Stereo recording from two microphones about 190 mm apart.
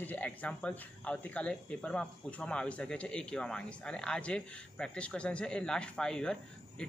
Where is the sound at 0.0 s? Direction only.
10° left (ahead or behind).